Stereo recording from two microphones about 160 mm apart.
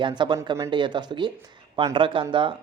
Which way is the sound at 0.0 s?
30° right (ahead or behind).